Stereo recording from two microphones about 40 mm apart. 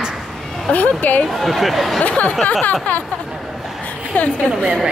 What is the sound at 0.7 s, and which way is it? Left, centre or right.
Speech, left.